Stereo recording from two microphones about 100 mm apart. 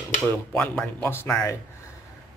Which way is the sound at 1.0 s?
20° left (ahead or behind).